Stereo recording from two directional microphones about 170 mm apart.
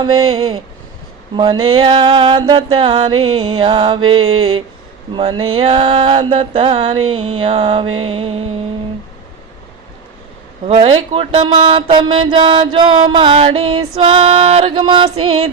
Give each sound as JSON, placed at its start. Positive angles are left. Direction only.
{"t": 1.4, "sound": "a sound", "side_deg": -25}
{"t": 5.1, "sound": "speech", "side_deg": -30}
{"t": 10.7, "sound": "speech", "side_deg": -35}